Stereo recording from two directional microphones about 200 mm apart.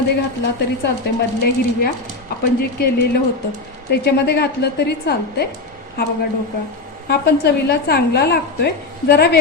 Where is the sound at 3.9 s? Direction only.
55° left (ahead or behind).